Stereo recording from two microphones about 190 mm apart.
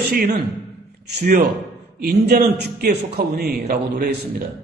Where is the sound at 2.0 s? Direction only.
60° right (ahead or behind).